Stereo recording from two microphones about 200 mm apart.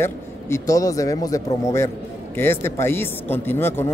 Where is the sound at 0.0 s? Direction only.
15° left (ahead or behind).